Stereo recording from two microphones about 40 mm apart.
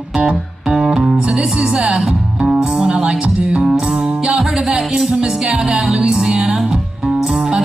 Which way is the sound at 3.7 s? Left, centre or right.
Centre.